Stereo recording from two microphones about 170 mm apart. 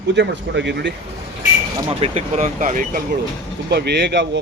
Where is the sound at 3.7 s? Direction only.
75° right (ahead or behind).